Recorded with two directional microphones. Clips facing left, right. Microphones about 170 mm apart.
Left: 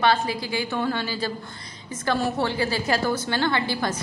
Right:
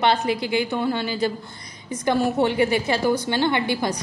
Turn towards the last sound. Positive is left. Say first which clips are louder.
# right 2 dB
turn(degrees=-20)  # may be behind; listen again after turning